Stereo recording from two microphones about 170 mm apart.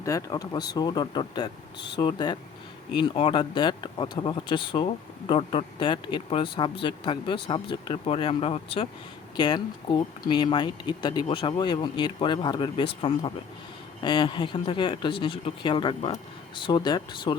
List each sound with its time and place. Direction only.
0.0 s speech: 20° left (ahead or behind)